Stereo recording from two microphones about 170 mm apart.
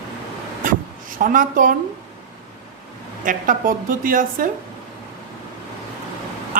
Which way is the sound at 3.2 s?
50° right (ahead or behind).